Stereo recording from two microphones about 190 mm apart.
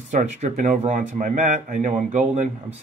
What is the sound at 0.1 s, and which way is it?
A man's voice, 40° right (ahead or behind).